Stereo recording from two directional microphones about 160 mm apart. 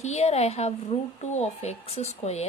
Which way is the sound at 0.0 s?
45° left (ahead or behind).